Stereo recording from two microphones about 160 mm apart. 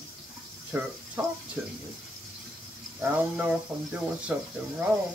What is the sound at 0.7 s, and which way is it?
Speech, 15° right (ahead or behind).